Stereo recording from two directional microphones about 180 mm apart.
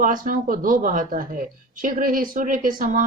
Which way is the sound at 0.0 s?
50° right (ahead or behind).